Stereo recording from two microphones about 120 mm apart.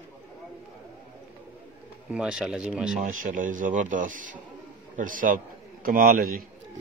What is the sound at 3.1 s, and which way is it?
Speech, 90° right.